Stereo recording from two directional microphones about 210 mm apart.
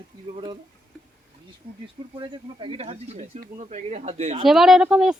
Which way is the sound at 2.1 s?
20° right (ahead or behind).